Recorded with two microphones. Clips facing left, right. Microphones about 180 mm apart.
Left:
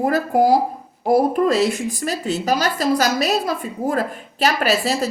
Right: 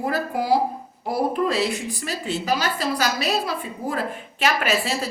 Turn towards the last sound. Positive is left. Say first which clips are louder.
# left 4 dB
turn(degrees=40)  # may be behind; listen again after turning